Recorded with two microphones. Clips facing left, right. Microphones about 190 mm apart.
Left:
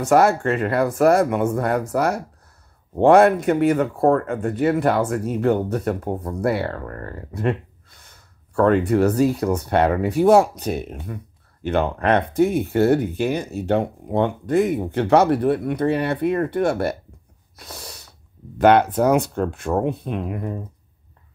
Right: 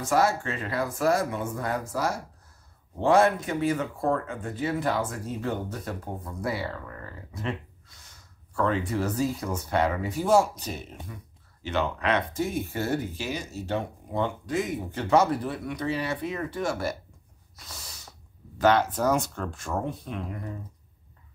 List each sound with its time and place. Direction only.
0.0 s speech: 65° left (ahead or behind)
17.6 s snort: 60° left (ahead or behind)
18.6 s speech: 60° left (ahead or behind)